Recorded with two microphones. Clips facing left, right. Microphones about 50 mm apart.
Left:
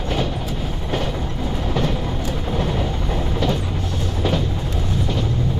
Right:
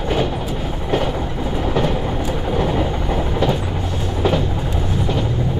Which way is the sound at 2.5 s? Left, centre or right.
Centre.